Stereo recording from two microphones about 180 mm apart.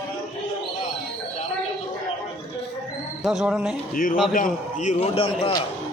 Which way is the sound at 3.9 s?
50° left (ahead or behind).